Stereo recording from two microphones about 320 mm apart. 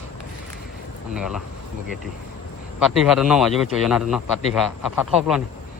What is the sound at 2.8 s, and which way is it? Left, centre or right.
A man's voice, centre.